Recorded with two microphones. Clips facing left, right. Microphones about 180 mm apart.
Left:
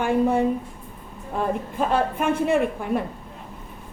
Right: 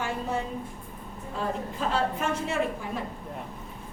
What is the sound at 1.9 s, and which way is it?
A woman's voice, 55° left (ahead or behind).